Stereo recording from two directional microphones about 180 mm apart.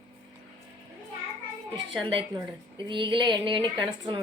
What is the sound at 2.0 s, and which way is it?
Speech, 30° right (ahead or behind).